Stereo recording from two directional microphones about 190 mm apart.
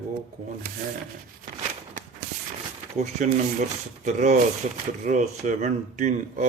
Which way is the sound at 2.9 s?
35° right (ahead or behind).